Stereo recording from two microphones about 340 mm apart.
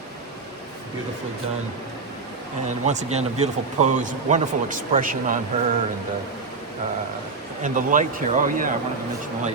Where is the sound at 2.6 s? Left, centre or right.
Centre.